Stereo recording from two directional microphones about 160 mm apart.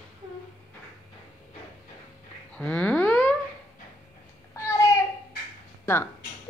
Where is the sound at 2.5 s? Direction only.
5° left (ahead or behind).